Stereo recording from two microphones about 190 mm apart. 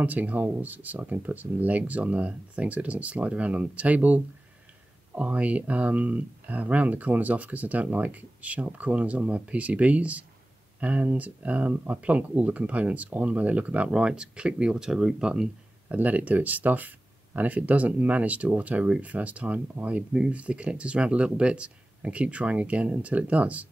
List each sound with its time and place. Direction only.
0.0 s speech: 10° right (ahead or behind)